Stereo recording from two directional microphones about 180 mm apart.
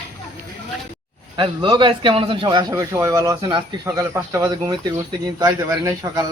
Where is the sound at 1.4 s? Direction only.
25° right (ahead or behind).